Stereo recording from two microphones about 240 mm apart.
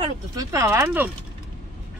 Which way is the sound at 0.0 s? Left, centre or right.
Centre.